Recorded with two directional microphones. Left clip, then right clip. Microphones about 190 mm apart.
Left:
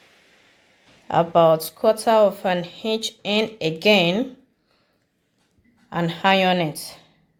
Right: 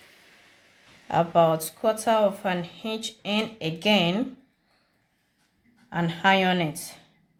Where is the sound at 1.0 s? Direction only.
20° left (ahead or behind).